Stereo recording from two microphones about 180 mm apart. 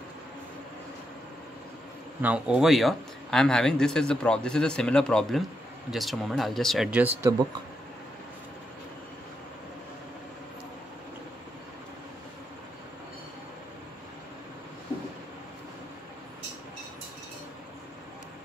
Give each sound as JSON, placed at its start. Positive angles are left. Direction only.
{"t": 2.2, "sound": "speech", "side_deg": -5}